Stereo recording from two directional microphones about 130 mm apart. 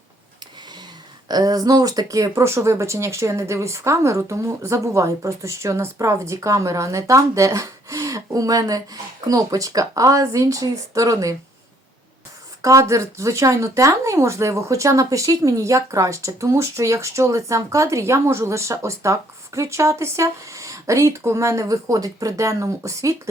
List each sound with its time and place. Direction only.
1.3 s speech: 30° right (ahead or behind)
12.6 s speech: 25° right (ahead or behind)